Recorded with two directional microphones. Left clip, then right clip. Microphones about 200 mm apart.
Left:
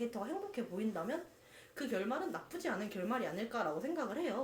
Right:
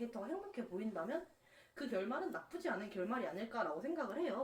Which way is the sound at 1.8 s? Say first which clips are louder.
Left 3 dB; 40° left (ahead or behind).